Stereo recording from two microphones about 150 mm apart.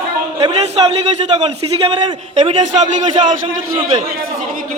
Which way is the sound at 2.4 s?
50° right (ahead or behind).